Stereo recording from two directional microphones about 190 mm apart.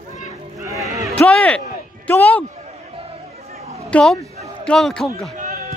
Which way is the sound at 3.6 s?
35° right (ahead or behind).